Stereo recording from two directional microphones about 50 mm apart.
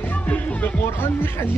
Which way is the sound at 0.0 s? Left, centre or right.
Left.